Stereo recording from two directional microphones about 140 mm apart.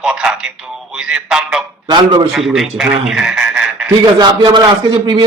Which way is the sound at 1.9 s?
35° right (ahead or behind).